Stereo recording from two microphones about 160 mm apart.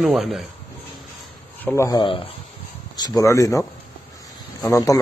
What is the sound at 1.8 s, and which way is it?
Speech, 25° left (ahead or behind).